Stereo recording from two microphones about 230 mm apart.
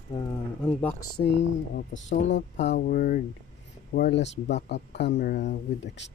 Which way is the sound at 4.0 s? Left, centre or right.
Left.